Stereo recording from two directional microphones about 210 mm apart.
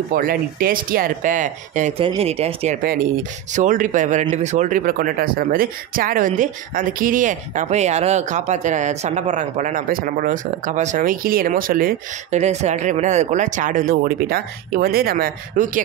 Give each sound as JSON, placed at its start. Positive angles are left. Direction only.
{"t": 0.1, "sound": "speech", "side_deg": -40}